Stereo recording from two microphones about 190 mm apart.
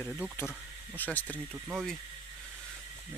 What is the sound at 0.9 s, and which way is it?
Speech, 10° left (ahead or behind).